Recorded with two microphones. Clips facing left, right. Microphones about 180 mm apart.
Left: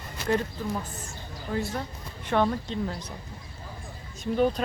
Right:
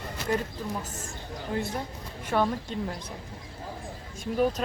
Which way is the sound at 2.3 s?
10° right (ahead or behind).